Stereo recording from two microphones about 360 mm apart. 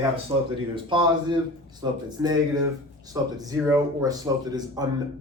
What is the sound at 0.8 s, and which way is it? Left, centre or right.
Speech, centre.